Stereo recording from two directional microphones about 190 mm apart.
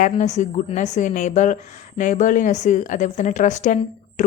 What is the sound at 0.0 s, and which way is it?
Speech, 40° left (ahead or behind).